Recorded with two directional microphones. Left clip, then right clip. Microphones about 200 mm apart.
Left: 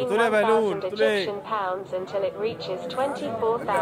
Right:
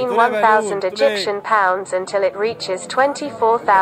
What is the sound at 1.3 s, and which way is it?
Speech, 90° right.